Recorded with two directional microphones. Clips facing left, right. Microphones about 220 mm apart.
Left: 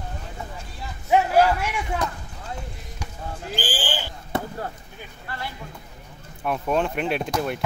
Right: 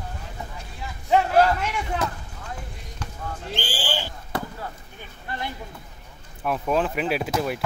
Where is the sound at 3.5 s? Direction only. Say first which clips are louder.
Left 3 dB; 5° left (ahead or behind).